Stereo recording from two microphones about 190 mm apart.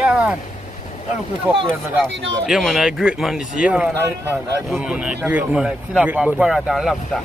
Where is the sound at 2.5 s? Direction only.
Centre (ahead or behind).